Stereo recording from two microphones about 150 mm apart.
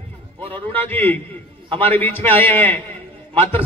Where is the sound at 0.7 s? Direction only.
15° left (ahead or behind).